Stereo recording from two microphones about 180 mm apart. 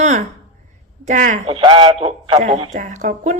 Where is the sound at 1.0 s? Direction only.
45° right (ahead or behind).